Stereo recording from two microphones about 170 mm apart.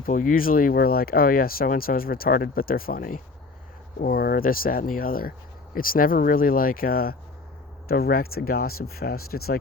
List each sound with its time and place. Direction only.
0.0 s speech: 50° left (ahead or behind)